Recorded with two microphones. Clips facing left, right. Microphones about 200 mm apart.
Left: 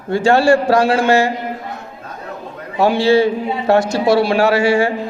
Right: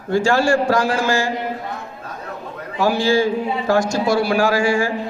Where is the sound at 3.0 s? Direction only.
65° left (ahead or behind).